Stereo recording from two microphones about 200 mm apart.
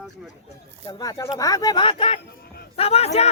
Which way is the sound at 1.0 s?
15° left (ahead or behind).